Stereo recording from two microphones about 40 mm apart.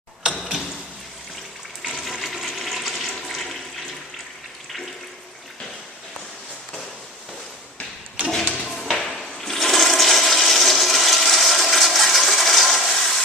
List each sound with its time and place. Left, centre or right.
1.8 s toilet flush: centre
8.2 s drawer open or close: right
8.6 s toilet flush: centre